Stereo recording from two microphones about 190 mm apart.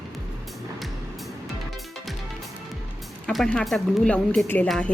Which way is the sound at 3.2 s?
5° left (ahead or behind).